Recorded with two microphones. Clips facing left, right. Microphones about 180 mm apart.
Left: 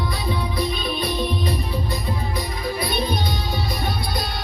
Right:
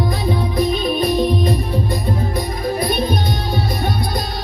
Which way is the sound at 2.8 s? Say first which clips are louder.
Right 4 dB; 50° right (ahead or behind).